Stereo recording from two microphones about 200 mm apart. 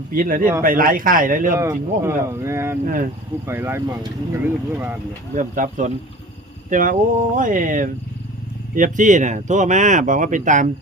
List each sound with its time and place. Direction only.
0.1 s a man's voice: 45° right (ahead or behind)
1.5 s speech: 15° right (ahead or behind)
2.8 s a man's voice: 45° right (ahead or behind)
3.4 s speech: 10° right (ahead or behind)
5.3 s speech: 40° right (ahead or behind)